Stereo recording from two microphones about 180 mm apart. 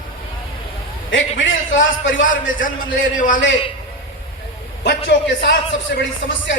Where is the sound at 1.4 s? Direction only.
90° left.